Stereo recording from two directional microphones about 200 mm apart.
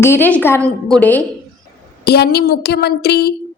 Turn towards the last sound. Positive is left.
turn(degrees=55)  # may be behind; listen again after turning